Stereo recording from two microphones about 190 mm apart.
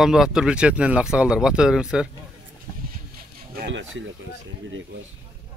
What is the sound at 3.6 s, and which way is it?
Speech, 80° right.